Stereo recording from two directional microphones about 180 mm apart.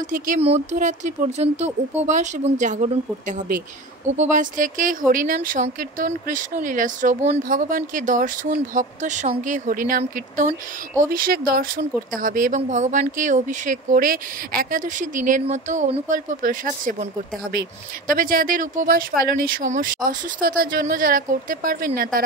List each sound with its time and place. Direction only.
0.4 s speech: 40° right (ahead or behind); by 22.2 s 55° right (ahead or behind)